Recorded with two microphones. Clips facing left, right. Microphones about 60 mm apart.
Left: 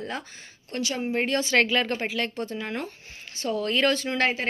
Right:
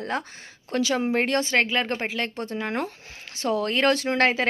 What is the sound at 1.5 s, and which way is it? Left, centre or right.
Speech, right.